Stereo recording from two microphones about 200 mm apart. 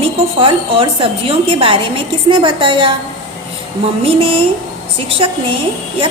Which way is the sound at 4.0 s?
30° right (ahead or behind).